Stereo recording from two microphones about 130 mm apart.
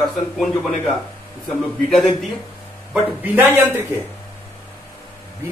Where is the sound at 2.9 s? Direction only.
15° right (ahead or behind).